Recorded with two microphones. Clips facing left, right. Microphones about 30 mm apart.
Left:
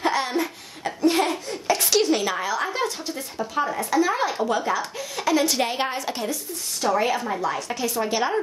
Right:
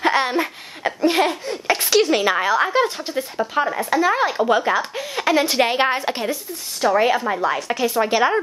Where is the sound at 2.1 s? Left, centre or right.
Right.